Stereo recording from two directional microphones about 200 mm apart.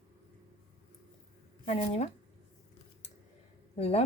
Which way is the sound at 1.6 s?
35° left (ahead or behind).